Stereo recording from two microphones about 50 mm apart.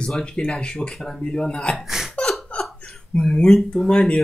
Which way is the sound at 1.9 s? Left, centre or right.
Centre.